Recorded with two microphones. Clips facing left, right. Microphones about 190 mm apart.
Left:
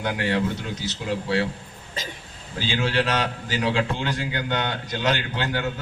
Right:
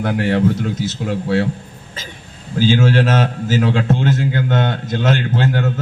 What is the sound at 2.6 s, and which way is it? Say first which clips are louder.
A man's voice: right 10 dB; 45° right (ahead or behind).